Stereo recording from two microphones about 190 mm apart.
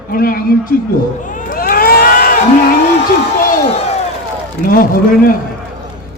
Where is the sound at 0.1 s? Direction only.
50° left (ahead or behind).